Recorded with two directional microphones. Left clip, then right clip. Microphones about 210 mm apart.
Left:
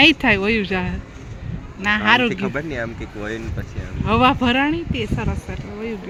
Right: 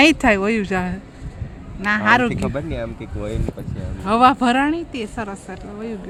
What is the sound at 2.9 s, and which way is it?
Speech, 40° right (ahead or behind).